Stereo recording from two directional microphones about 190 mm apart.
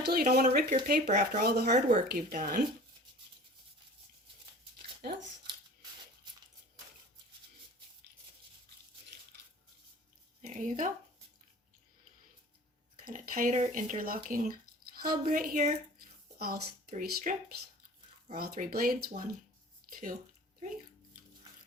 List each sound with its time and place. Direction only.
0.0 s speech: 55° right (ahead or behind)
10.4 s speech: 45° right (ahead or behind)
13.1 s speech: 45° right (ahead or behind)
18.5 s speech: 45° right (ahead or behind)